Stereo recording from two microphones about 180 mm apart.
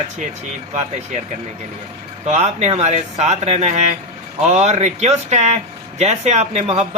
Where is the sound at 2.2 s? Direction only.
40° right (ahead or behind).